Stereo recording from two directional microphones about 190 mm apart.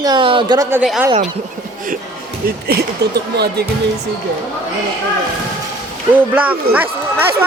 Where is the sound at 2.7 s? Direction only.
60° right (ahead or behind).